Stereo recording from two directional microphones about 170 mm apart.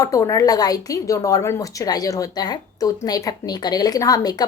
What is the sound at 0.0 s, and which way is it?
A woman's voice, 20° left (ahead or behind).